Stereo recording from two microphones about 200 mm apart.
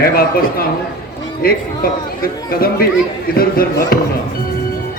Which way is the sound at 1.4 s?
45° left (ahead or behind).